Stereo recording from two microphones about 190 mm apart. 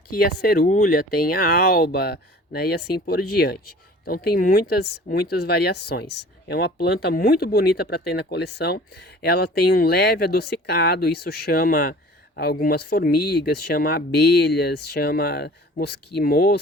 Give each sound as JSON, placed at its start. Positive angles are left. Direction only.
{"t": 0.1, "sound": "speech", "side_deg": 55}